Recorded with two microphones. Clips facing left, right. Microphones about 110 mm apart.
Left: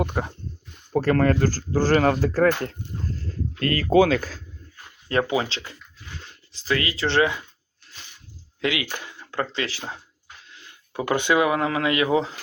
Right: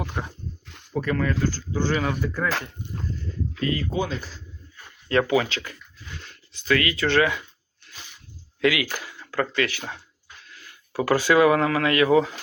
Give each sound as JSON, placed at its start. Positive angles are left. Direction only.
{"t": 0.7, "sound": "a sound", "side_deg": -90}
{"t": 1.0, "sound": "speech", "side_deg": 55}
{"t": 1.7, "sound": "speech", "side_deg": 40}
{"t": 2.2, "sound": "speech", "side_deg": 90}
{"t": 3.6, "sound": "speech", "side_deg": 65}
{"t": 3.9, "sound": "speech", "side_deg": 90}
{"t": 4.2, "sound": "speech", "side_deg": 50}
{"t": 5.1, "sound": "speech", "side_deg": 25}
{"t": 8.6, "sound": "speech", "side_deg": 25}